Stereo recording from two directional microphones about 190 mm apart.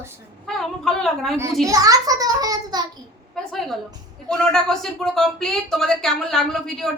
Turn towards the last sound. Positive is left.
turn(degrees=0)  # may be behind; listen again after turning